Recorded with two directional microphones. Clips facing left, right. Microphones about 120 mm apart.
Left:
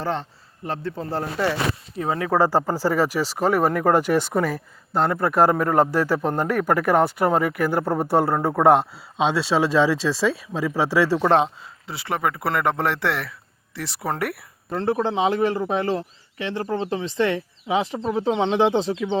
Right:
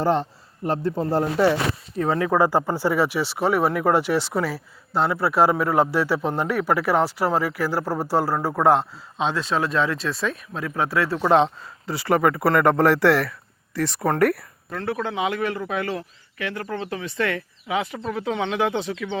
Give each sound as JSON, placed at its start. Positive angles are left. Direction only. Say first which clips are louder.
{"t": 0.0, "sound": "speech", "louder": "right 5 dB", "side_deg": -40}
{"t": 1.1, "sound": "speech", "louder": "right 5 dB", "side_deg": -10}
{"t": 2.0, "sound": "speech", "louder": "right 1 dB", "side_deg": 25}
{"t": 9.3, "sound": "speech", "louder": "left 4 dB", "side_deg": 90}
{"t": 10.8, "sound": "speech", "louder": "left 3 dB", "side_deg": 90}
{"t": 11.4, "sound": "speech", "louder": "right 4 dB", "side_deg": 0}
{"t": 14.7, "sound": "a man's voice", "louder": "left 5 dB", "side_deg": 30}